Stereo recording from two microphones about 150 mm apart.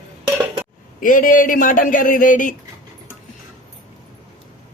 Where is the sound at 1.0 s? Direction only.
65° left (ahead or behind).